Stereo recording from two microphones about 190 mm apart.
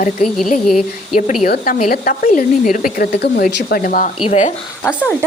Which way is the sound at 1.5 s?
50° left (ahead or behind).